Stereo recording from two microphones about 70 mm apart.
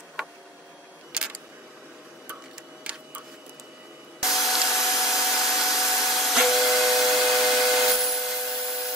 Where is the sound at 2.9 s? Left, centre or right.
Centre.